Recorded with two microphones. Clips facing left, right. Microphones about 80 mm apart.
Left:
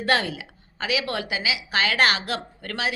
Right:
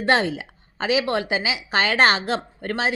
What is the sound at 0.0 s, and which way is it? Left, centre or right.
A woman's voice, right.